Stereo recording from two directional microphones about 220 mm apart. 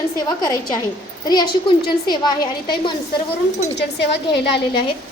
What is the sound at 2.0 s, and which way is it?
Speech, 20° left (ahead or behind).